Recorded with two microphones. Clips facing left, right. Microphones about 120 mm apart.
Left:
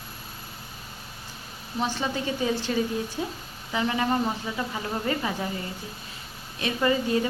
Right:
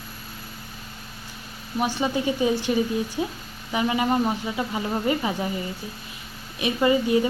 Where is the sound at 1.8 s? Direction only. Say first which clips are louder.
Right 4 dB; 15° right (ahead or behind).